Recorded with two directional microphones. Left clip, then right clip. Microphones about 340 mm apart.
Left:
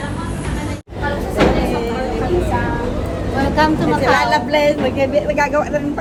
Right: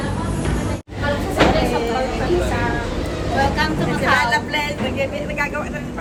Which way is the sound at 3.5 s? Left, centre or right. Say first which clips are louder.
Left 6 dB; left.